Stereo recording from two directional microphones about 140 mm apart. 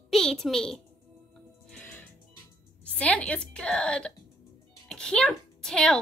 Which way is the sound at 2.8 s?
10° left (ahead or behind).